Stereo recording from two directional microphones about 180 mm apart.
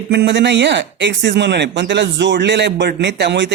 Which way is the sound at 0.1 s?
70° right (ahead or behind).